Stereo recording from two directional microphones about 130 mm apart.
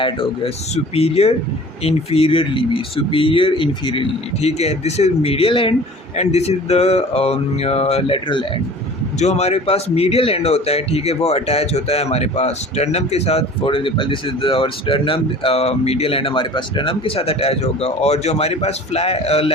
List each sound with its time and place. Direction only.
0.0 s a man's voice: 45° left (ahead or behind)
6.1 s a man's voice: 55° left (ahead or behind); by 8.4 s 40° left (ahead or behind)
9.1 s a man's voice: 60° left (ahead or behind)